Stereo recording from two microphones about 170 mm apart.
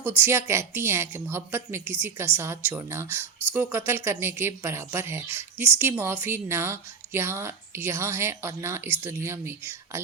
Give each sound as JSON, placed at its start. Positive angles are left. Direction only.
{"t": 0.0, "sound": "speech", "side_deg": -10}